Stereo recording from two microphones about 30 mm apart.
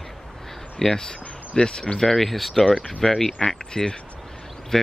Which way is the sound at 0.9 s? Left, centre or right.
Left.